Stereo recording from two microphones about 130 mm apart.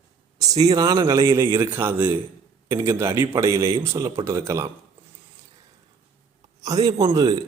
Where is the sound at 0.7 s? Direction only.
30° right (ahead or behind).